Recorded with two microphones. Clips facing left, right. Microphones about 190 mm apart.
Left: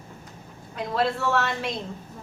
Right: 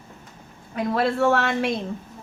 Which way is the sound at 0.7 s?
55° right (ahead or behind).